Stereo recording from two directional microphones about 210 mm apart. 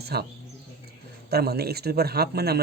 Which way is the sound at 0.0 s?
50° right (ahead or behind).